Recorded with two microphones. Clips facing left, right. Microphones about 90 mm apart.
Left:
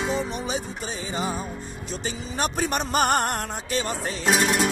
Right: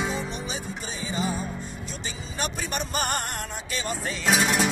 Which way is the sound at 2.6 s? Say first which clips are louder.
Left 8 dB; 50° left (ahead or behind).